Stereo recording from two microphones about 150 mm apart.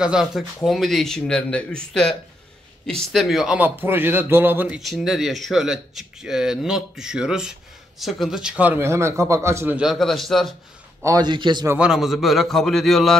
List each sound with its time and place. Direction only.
0.0 s a man's voice: 5° right (ahead or behind)
9.8 s speech: centre (ahead or behind)
11.1 s a man's voice: 30° right (ahead or behind)
11.6 s a man's voice: 15° right (ahead or behind)
11.9 s speech: centre (ahead or behind)